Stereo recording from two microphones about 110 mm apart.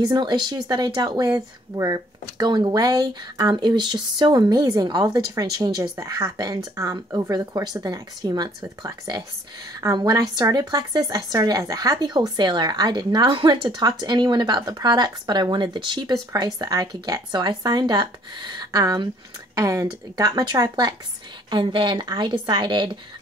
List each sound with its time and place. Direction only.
0.0 s speech: 40° right (ahead or behind)
21.5 s speech: 50° right (ahead or behind)